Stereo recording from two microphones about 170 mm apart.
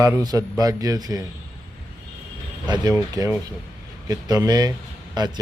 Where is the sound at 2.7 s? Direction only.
20° right (ahead or behind).